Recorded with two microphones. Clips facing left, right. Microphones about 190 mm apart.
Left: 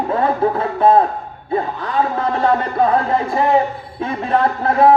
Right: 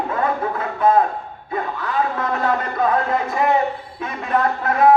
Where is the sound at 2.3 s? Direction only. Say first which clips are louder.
Left 6 dB; 30° left (ahead or behind).